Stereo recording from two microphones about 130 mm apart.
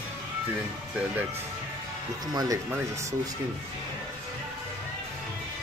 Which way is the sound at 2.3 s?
25° right (ahead or behind).